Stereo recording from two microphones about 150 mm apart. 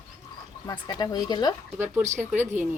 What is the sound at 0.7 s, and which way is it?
Speech, 30° left (ahead or behind).